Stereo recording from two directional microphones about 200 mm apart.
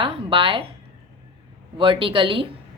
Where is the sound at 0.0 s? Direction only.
25° right (ahead or behind).